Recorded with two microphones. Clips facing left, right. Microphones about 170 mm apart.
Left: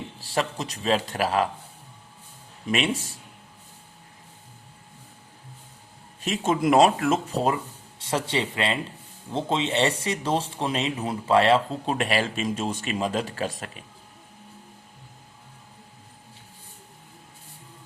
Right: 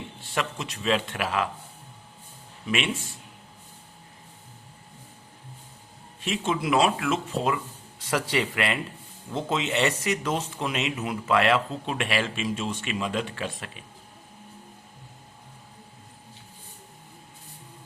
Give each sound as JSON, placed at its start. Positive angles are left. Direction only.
{"t": 0.2, "sound": "speech", "side_deg": 35}
{"t": 2.6, "sound": "speech", "side_deg": 40}
{"t": 6.2, "sound": "speech", "side_deg": 40}